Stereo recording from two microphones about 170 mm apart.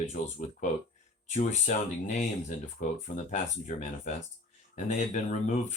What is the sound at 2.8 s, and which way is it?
Speech, 45° left (ahead or behind).